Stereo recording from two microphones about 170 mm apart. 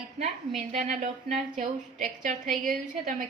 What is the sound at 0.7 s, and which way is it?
A woman's voice, 45° right (ahead or behind).